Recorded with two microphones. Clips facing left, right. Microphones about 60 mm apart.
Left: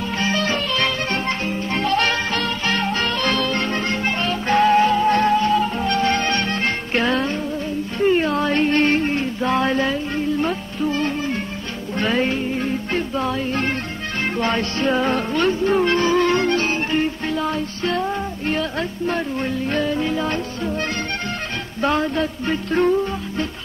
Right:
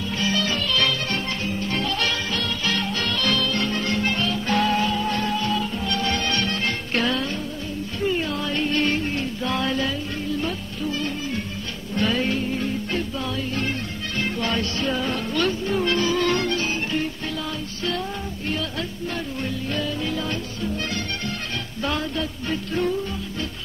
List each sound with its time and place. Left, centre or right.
0.2 s music: left
8.0 s music: left
16.5 s music: left
21.8 s music: left